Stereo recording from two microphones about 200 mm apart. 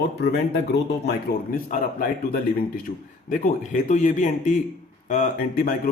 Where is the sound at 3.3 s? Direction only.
40° left (ahead or behind).